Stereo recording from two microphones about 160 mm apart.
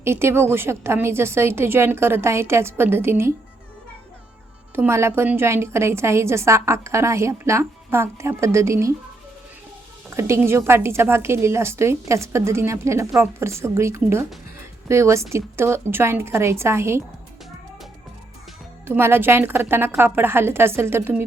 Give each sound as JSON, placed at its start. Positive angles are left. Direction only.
{"t": 0.0, "sound": "a woman's voice", "side_deg": -15}
{"t": 4.7, "sound": "a woman's voice", "side_deg": -15}
{"t": 10.1, "sound": "a woman's voice", "side_deg": -15}
{"t": 18.9, "sound": "a woman's voice", "side_deg": -15}